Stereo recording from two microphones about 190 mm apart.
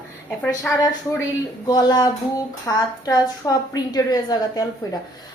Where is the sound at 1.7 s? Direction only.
20° left (ahead or behind).